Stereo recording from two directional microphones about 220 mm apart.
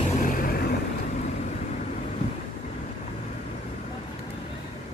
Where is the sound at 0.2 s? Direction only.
40° left (ahead or behind).